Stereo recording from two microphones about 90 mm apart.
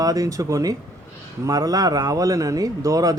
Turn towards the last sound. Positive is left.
turn(degrees=-40)  # may be behind; listen again after turning